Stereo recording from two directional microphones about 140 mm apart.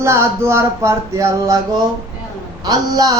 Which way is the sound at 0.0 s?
20° right (ahead or behind).